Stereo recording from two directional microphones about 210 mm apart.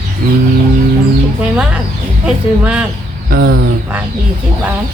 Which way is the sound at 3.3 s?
45° right (ahead or behind).